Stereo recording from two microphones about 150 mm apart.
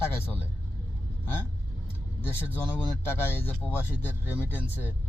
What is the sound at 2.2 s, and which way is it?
Speech, 15° left (ahead or behind).